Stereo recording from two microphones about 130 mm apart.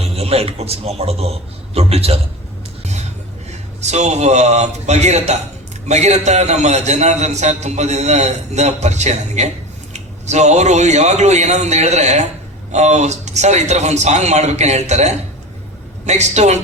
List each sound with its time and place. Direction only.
0.0 s a man's voice: 50° right (ahead or behind)
3.8 s a man's voice: 60° right (ahead or behind)